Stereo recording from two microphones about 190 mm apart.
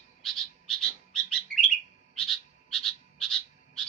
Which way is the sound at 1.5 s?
50° right (ahead or behind).